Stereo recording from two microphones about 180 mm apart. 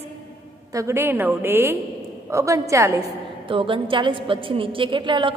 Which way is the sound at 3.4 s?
30° right (ahead or behind).